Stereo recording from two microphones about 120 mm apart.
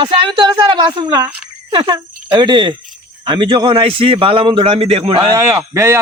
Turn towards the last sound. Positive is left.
turn(degrees=-25)  # may be behind; listen again after turning